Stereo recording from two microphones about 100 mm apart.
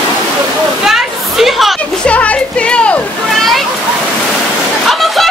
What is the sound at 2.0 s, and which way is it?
Music, 15° left (ahead or behind).